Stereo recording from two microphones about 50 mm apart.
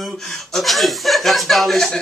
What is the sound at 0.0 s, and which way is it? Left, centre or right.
Speech, centre.